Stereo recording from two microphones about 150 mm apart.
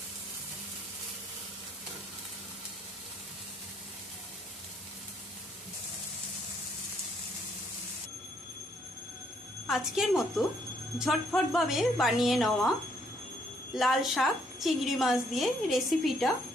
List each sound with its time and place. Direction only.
9.7 s a woman's voice: 5° right (ahead or behind)
13.7 s a woman's voice: centre (ahead or behind)